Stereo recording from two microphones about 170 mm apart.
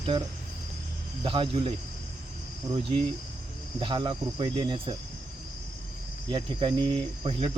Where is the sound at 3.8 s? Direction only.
30° right (ahead or behind).